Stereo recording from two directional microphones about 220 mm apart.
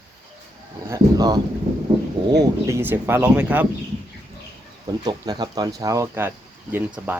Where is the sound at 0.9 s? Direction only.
15° right (ahead or behind).